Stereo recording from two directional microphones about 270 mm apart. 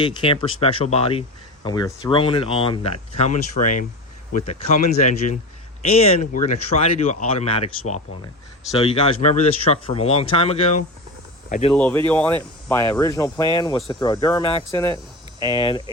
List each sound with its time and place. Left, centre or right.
0.0 s speech: centre
11.7 s speech: centre